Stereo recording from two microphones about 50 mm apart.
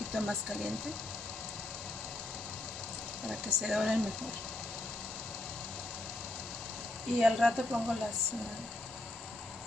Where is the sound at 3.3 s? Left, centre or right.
Centre.